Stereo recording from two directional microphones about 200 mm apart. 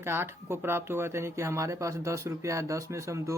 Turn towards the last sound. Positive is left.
turn(degrees=-15)  # may be behind; listen again after turning